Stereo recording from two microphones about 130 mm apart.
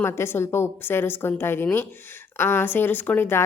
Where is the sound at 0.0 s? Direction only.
20° left (ahead or behind).